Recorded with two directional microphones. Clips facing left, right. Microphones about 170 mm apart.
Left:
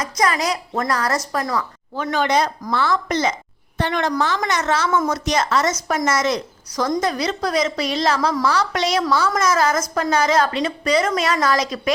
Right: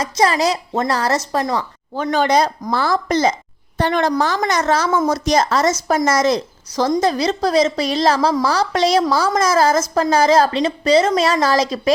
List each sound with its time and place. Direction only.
0.0 s a woman's voice: 30° right (ahead or behind)